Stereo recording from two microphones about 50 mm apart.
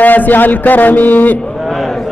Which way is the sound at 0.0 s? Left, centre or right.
Left.